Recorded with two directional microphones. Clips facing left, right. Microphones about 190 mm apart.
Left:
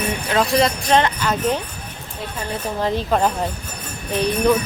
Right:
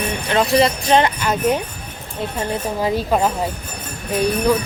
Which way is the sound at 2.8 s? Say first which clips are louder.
Even; 10° right (ahead or behind).